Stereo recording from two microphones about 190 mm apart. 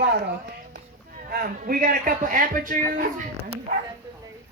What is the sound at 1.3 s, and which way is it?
A woman's voice, 50° right (ahead or behind).